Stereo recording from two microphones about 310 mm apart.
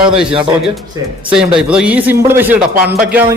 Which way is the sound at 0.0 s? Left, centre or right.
Centre.